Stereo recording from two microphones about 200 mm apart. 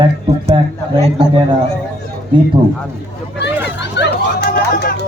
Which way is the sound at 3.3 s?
60° left (ahead or behind).